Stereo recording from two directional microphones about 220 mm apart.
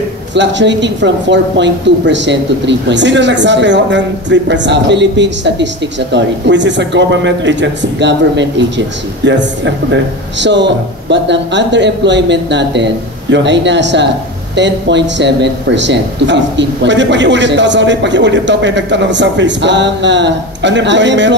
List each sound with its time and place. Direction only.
0.3 s speech: 55° right (ahead or behind)